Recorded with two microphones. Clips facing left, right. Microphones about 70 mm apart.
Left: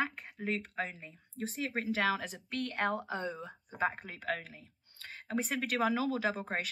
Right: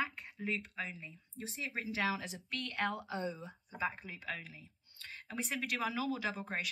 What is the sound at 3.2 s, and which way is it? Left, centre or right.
Speech, left.